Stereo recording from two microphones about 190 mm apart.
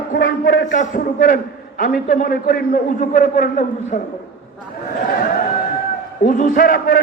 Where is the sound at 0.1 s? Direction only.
45° left (ahead or behind).